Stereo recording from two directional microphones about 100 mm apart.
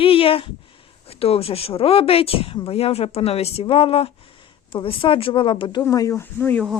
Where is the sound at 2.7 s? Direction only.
85° left.